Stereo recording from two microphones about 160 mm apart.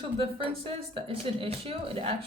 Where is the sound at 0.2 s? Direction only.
35° right (ahead or behind).